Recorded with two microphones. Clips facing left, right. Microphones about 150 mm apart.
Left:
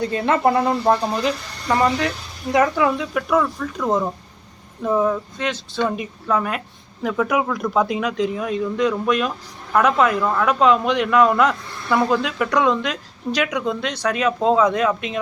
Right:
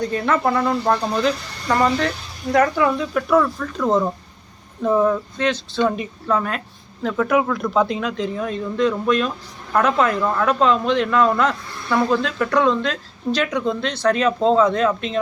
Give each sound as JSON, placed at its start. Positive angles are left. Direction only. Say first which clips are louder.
{"t": 0.1, "sound": "speech", "louder": "left 4 dB", "side_deg": 25}
{"t": 1.2, "sound": "speech", "louder": "right 2 dB", "side_deg": 10}